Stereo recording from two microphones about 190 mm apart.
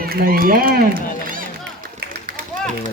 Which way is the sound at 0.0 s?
50° right (ahead or behind).